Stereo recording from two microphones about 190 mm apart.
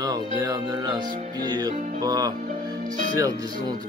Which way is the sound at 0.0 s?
20° right (ahead or behind).